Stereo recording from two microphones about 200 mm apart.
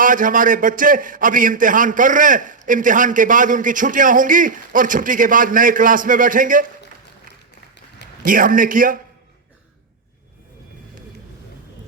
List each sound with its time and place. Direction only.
0.0 s a man's voice: 40° right (ahead or behind)
8.2 s a man's voice: 45° right (ahead or behind)